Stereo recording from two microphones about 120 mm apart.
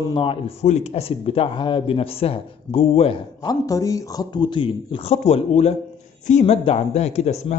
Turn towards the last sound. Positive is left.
turn(degrees=65)  # may be behind; listen again after turning